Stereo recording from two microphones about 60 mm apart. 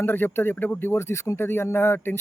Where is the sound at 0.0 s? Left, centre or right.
Left.